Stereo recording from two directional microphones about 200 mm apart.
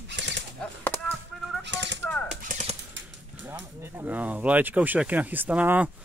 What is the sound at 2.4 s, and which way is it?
Speech, 35° right (ahead or behind).